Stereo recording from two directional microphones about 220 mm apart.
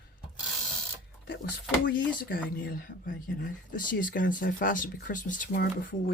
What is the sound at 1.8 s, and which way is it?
Speech, 40° left (ahead or behind).